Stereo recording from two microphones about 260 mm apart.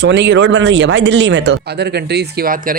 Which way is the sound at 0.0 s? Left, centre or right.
Right.